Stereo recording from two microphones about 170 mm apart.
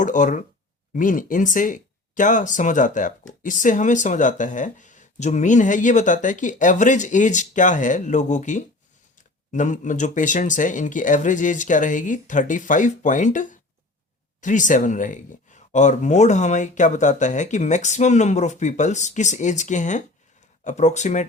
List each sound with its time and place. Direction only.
0.0 s speech: 45° left (ahead or behind)